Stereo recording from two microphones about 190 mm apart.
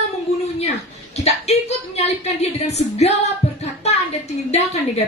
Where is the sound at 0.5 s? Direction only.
35° left (ahead or behind).